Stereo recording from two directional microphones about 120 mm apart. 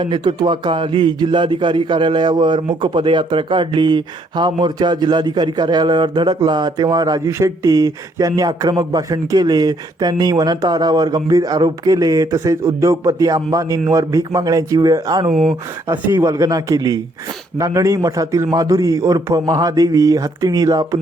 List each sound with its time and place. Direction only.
0.0 s speech: 40° right (ahead or behind)
15.3 s speech: centre (ahead or behind)
15.9 s a man's voice: 25° right (ahead or behind)